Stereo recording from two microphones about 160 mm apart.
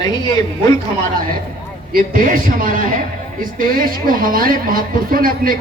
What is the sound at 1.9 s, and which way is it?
A man's voice, 60° right (ahead or behind).